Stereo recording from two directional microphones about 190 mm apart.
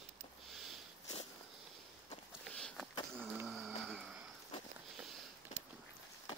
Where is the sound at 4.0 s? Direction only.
5° right (ahead or behind).